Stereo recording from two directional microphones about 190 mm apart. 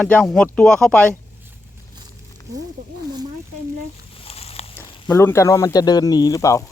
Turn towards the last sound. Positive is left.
turn(degrees=15)  # may be behind; listen again after turning